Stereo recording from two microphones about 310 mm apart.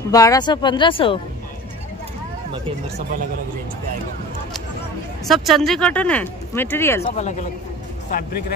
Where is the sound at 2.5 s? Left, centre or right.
Right.